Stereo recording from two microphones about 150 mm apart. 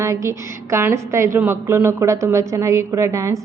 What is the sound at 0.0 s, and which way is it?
A woman's voice, 20° right (ahead or behind).